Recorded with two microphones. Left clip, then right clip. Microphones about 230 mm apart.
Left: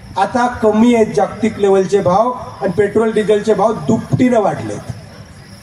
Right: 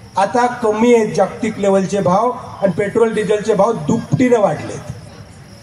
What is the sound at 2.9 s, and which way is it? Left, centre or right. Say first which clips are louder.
Speech: left 1 dB; left.